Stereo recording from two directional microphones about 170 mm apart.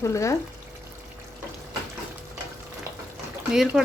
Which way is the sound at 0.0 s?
20° left (ahead or behind).